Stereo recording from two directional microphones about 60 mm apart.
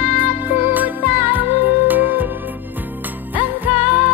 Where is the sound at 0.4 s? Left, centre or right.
Right.